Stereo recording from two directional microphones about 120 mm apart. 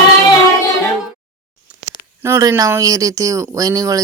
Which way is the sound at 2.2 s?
25° right (ahead or behind).